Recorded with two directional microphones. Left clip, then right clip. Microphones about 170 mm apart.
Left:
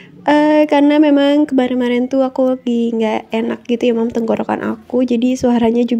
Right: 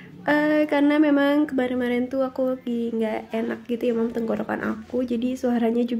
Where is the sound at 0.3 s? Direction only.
35° left (ahead or behind).